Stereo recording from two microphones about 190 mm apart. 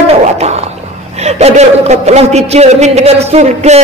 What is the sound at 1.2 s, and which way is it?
A man's voice, 35° right (ahead or behind).